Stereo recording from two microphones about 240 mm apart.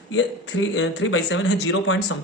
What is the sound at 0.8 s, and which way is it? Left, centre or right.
Speech, left.